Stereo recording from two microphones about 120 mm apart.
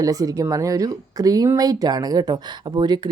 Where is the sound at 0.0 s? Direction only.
30° right (ahead or behind).